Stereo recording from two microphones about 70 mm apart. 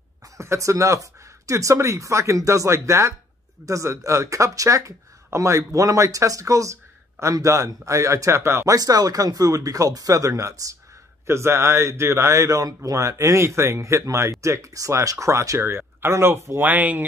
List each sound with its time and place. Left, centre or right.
0.4 s speech: right
8.6 s speech: right
11.2 s speech: right
15.6 s speech: right